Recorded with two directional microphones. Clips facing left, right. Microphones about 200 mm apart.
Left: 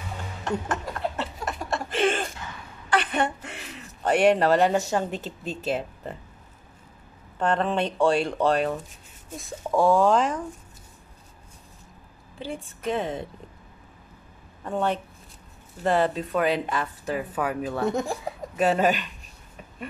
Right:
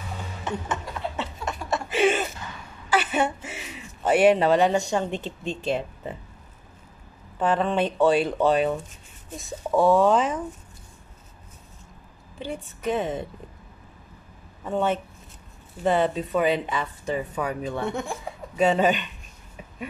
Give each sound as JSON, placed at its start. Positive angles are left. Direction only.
{"t": 0.5, "sound": "a sound", "side_deg": 0}
{"t": 2.9, "sound": "speech", "side_deg": -5}
{"t": 7.3, "sound": "speech", "side_deg": -5}
{"t": 12.4, "sound": "speech", "side_deg": 0}
{"t": 14.6, "sound": "speech", "side_deg": 0}
{"t": 17.8, "sound": "speech", "side_deg": 40}
{"t": 18.6, "sound": "speech", "side_deg": 0}